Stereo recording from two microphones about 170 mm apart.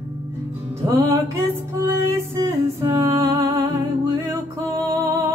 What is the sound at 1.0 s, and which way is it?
Music, 15° right (ahead or behind).